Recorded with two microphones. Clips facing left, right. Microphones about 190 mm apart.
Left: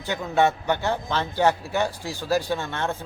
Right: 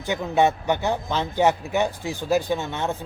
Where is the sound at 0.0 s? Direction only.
15° right (ahead or behind).